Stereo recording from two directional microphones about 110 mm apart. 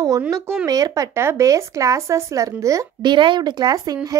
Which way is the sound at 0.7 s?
35° right (ahead or behind).